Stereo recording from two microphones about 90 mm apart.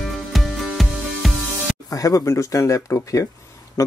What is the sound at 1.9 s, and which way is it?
Speech, 40° left (ahead or behind).